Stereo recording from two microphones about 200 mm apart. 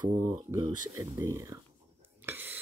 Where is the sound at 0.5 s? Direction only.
15° right (ahead or behind).